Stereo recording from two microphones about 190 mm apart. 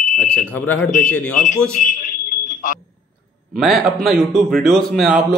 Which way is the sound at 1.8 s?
45° left (ahead or behind).